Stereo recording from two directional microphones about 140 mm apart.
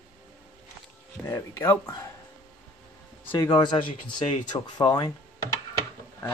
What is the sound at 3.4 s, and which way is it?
Speech, 30° left (ahead or behind).